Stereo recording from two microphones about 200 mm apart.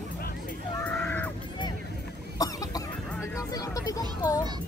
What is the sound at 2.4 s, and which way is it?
Cough, 15° left (ahead or behind).